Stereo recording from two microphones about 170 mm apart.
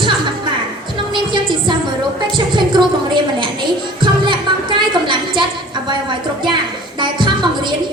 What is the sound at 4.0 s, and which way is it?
Music, 30° right (ahead or behind).